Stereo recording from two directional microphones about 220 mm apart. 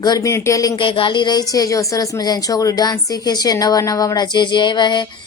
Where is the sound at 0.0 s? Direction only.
15° left (ahead or behind).